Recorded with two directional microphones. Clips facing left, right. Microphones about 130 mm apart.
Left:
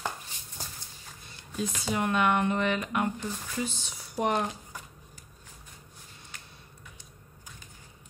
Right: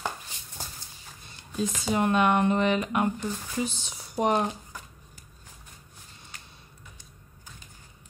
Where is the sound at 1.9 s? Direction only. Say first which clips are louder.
Right 3 dB; 25° right (ahead or behind).